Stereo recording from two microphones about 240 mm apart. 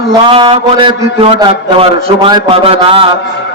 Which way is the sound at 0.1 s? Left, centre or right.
Right.